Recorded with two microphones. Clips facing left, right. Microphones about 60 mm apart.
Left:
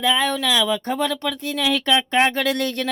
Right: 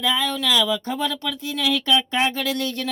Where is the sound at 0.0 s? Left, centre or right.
Left.